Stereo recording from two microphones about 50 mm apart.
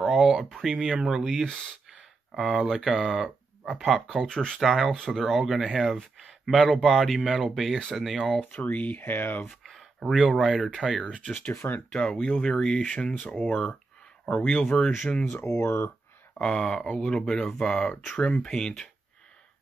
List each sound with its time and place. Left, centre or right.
0.0 s a sound: centre
0.3 s speech: centre
4.3 s speech: centre
4.6 s speech: centre
8.4 s speech: left
9.5 s a sound: centre
10.4 s speech: centre
11.9 s speech: centre
15.4 s speech: left
16.3 s speech: centre